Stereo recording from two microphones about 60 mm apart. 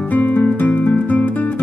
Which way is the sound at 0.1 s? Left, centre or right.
Left.